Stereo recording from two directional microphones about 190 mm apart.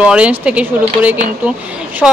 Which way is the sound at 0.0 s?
5° right (ahead or behind).